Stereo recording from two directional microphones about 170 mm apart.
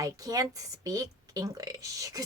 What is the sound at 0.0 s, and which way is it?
Speech, 20° right (ahead or behind).